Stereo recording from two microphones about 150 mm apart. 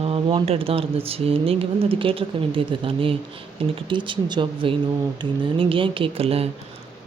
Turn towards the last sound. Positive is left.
turn(degrees=-40)  # may be behind; listen again after turning